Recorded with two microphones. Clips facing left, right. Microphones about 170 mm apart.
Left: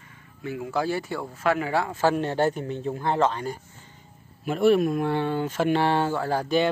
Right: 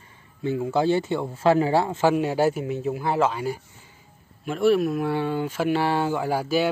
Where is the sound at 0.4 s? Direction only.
25° right (ahead or behind).